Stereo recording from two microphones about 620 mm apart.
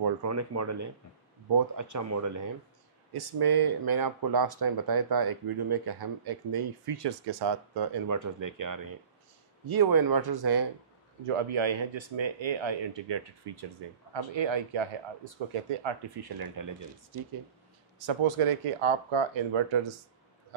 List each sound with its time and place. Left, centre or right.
0.0 s speech: right
11.2 s speech: right
18.0 s speech: right